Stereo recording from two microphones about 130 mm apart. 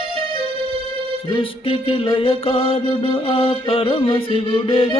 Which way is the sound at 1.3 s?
40° left (ahead or behind).